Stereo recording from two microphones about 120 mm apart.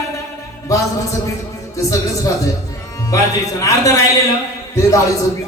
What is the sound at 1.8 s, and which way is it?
Speech, 30° left (ahead or behind).